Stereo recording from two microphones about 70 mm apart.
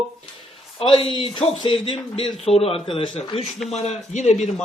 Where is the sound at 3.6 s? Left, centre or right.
Centre.